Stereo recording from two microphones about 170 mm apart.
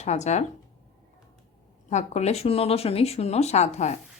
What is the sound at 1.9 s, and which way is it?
Speech, 40° left (ahead or behind).